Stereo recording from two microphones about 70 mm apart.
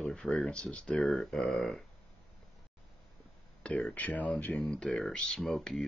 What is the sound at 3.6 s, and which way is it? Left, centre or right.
Speech, centre.